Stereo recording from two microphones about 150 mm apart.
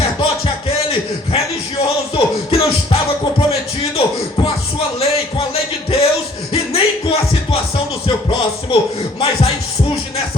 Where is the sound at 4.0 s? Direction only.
35° left (ahead or behind).